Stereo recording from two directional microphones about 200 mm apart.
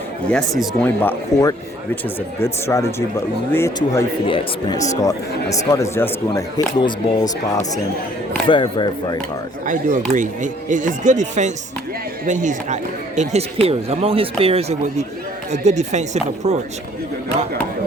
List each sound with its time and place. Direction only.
0.3 s speech: centre (ahead or behind)
1.0 s speech: 15° left (ahead or behind)
9.6 s speech: 40° right (ahead or behind)